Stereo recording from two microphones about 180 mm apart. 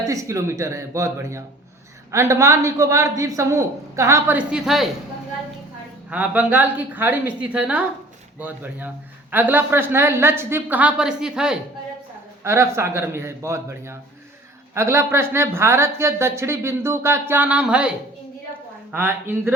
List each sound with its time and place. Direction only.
0.1 s speech: 15° right (ahead or behind)
6.1 s speech: 10° right (ahead or behind)
12.4 s speech: 15° right (ahead or behind)